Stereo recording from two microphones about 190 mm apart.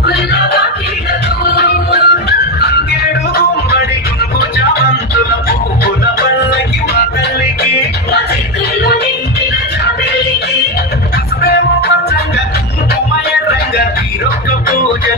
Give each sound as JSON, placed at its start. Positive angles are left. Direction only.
{"t": 1.5, "sound": "music", "side_deg": 55}
{"t": 8.8, "sound": "music", "side_deg": 60}